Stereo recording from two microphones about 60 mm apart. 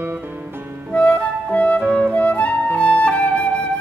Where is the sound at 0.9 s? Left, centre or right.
Left.